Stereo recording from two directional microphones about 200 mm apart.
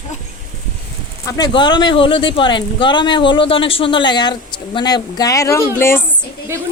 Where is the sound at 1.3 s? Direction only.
20° left (ahead or behind).